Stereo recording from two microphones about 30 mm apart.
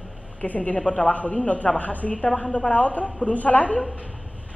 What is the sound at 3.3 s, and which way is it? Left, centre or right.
Speech, left.